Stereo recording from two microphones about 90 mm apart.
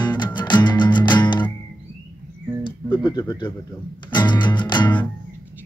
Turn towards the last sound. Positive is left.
turn(degrees=55)  # may be behind; listen again after turning